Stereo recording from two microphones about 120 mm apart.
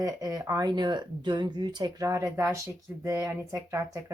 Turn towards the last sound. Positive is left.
turn(degrees=-25)  # may be behind; listen again after turning